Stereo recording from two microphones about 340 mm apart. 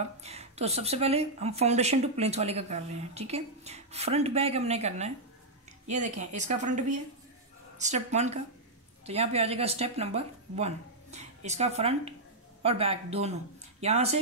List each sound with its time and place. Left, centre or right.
0.2 s speech: centre